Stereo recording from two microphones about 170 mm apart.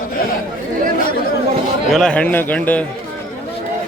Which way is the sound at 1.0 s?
60° left (ahead or behind).